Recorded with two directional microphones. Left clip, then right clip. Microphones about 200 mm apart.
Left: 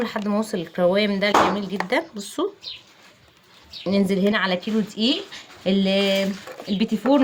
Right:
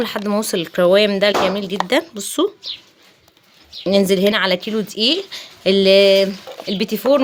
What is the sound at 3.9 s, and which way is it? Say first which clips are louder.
A woman's voice: right 7 dB; 55° right (ahead or behind).